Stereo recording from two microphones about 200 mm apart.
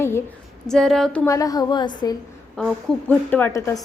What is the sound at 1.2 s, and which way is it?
Speech, 15° left (ahead or behind).